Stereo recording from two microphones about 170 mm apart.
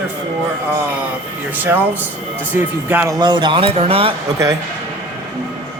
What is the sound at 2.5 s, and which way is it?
Speech, 10° right (ahead or behind).